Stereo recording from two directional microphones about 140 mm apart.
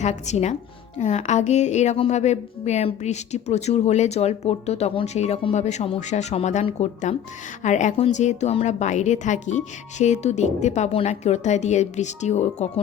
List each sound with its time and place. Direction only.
0.0 s a woman's voice: 55° left (ahead or behind)